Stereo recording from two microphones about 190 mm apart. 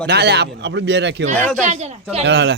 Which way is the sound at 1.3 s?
10° left (ahead or behind).